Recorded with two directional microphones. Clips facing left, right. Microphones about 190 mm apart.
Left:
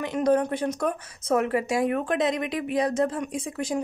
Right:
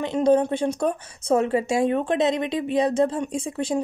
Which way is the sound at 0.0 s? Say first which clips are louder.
Right 3 dB; 25° right (ahead or behind).